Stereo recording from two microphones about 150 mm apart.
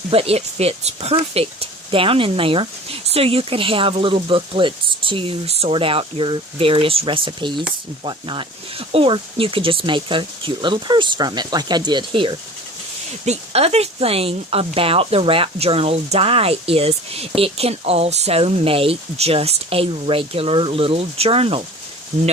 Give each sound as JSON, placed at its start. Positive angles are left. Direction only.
{"t": 0.1, "sound": "speech", "side_deg": -40}
{"t": 13.2, "sound": "speech", "side_deg": -45}